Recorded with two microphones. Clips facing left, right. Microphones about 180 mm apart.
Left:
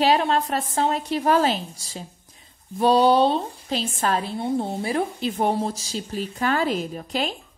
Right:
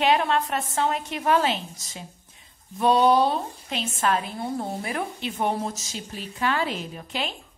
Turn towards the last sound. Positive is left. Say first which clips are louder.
# left 5 dB
turn(degrees=40)  # may be behind; listen again after turning